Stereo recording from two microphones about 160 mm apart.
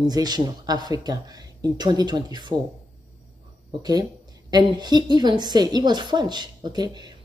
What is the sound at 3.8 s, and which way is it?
A woman's voice, 25° right (ahead or behind).